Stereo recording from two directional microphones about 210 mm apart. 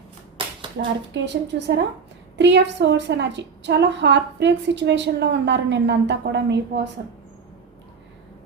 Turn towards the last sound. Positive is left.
turn(degrees=-55)  # may be behind; listen again after turning